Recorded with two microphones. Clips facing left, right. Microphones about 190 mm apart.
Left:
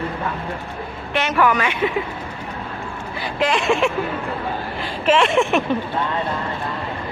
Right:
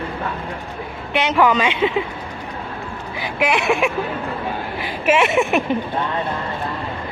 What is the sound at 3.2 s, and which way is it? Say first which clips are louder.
Speech: even; 10° right (ahead or behind).